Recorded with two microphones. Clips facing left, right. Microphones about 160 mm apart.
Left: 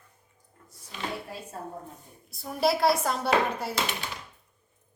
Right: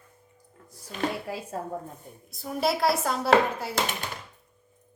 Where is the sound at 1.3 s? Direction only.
90° right.